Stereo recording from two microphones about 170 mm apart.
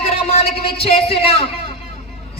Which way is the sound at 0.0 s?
35° left (ahead or behind).